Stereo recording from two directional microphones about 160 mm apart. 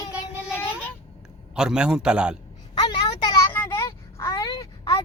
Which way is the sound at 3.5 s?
15° left (ahead or behind).